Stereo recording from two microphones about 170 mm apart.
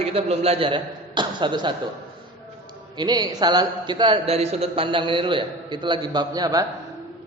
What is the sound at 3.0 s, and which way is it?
A man's voice, 25° right (ahead or behind).